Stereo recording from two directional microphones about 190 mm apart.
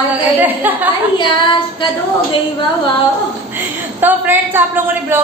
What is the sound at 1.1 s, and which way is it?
Child singing, 25° left (ahead or behind).